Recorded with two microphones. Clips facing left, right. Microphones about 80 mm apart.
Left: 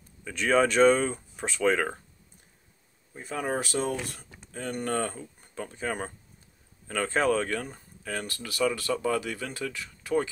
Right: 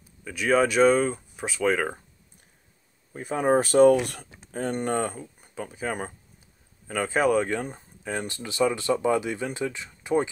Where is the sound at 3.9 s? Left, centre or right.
Right.